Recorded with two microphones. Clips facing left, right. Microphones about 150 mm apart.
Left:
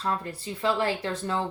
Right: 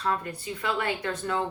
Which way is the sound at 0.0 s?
30° left (ahead or behind).